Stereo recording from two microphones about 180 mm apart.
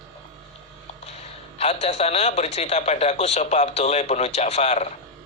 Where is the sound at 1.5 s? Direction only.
35° left (ahead or behind).